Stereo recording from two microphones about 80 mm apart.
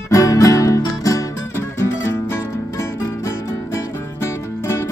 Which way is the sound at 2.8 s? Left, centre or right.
Left.